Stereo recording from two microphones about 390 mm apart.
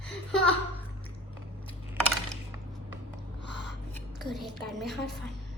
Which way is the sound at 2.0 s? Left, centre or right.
Centre.